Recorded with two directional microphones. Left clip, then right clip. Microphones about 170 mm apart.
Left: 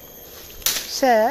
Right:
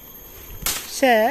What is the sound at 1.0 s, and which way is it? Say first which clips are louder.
Speech: even; 25° right (ahead or behind).